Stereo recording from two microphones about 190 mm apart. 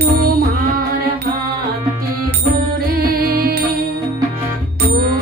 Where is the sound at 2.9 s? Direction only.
55° right (ahead or behind).